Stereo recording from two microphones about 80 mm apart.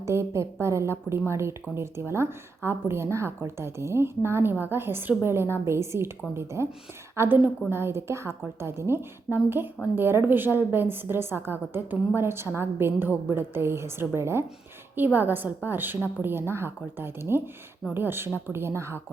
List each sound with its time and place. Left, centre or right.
0.0 s a woman's voice: right